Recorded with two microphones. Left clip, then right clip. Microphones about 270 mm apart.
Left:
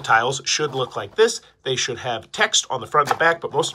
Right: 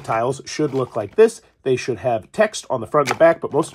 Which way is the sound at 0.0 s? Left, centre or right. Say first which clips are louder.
Left 3 dB; right.